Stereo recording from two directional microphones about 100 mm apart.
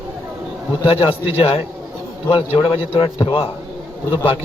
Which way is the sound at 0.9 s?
70° left (ahead or behind).